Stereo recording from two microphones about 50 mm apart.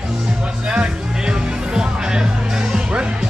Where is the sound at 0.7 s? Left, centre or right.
Centre.